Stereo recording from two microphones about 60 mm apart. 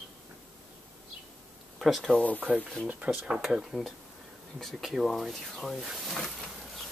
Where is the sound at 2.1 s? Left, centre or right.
Left.